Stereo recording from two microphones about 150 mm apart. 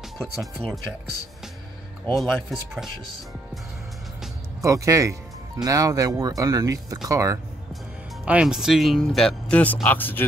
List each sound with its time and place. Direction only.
0.6 s speech: 10° left (ahead or behind)
2.1 s speech: centre (ahead or behind)
4.6 s speech: 20° right (ahead or behind)
8.3 s speech: 5° right (ahead or behind); by 10.2 s 10° left (ahead or behind)